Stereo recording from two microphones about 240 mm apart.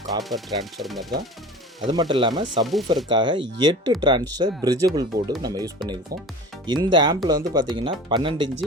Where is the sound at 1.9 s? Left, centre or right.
Centre.